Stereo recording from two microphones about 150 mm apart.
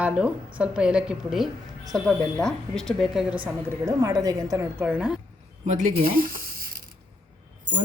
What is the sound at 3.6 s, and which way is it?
A woman's voice, 20° right (ahead or behind).